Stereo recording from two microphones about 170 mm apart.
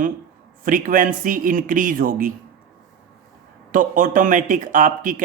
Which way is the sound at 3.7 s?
50° right (ahead or behind).